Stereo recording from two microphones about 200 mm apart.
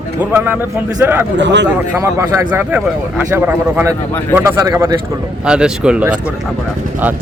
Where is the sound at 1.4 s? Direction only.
60° right (ahead or behind).